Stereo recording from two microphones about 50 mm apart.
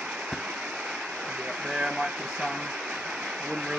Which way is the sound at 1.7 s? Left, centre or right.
Centre.